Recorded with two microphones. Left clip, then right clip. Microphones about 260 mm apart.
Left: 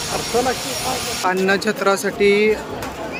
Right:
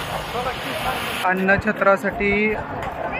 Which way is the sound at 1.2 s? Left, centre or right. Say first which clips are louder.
Left 1 dB; centre.